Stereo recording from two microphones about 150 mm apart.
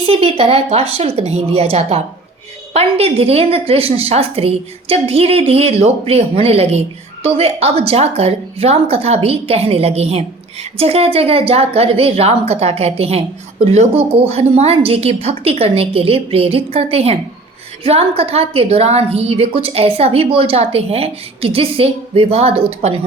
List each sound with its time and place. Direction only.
0.0 s a woman's voice: 40° right (ahead or behind)